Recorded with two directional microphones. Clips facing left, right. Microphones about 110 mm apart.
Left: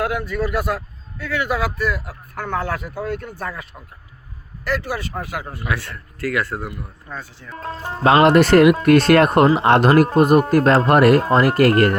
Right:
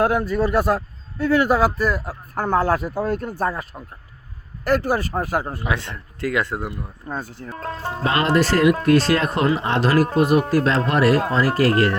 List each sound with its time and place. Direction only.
0.0 s a man's voice: 35° right (ahead or behind)
5.6 s speech: 20° right (ahead or behind)
7.1 s speech: 45° right (ahead or behind)
7.6 s speech: 15° left (ahead or behind)
8.0 s speech: 70° left (ahead or behind)
10.2 s speech: 50° left (ahead or behind)